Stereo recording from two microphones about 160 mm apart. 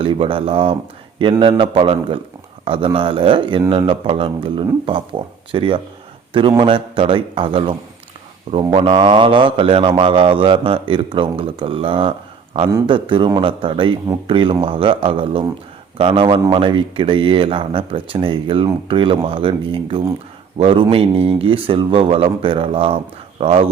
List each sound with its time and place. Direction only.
0.0 s speech: 35° right (ahead or behind)